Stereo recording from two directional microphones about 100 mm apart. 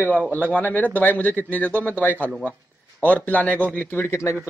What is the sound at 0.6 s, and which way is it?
A man's voice, 15° left (ahead or behind).